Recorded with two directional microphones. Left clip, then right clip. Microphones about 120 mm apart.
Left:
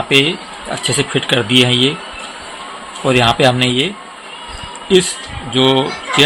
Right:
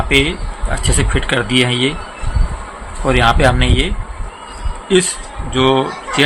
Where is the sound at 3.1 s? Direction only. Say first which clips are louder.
Left 1 dB; 35° left (ahead or behind).